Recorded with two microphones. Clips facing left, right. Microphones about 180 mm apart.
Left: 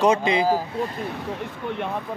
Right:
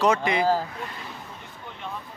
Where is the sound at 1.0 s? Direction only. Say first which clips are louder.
Left 11 dB; 70° left (ahead or behind).